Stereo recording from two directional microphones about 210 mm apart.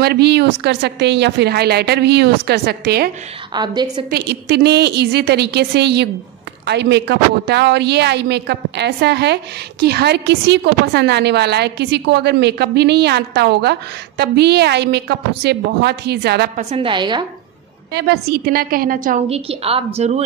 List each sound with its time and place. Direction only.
0.0 s a woman's voice: 50° right (ahead or behind)
3.5 s a woman's voice: 20° right (ahead or behind)
4.1 s a woman's voice: 50° right (ahead or behind)
16.5 s a woman's voice: 25° right (ahead or behind)
17.9 s a woman's voice: 50° right (ahead or behind); by 20.2 s 30° right (ahead or behind)